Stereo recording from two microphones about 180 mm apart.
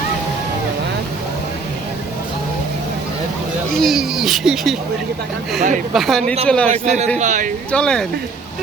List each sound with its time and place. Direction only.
3.8 s speech: centre (ahead or behind)
5.9 s a man's voice: centre (ahead or behind)
6.7 s a man's voice: 40° right (ahead or behind)
7.7 s speech: 5° left (ahead or behind)